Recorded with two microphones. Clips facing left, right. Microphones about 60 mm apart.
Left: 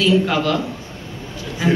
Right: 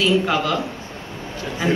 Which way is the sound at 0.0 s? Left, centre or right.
Centre.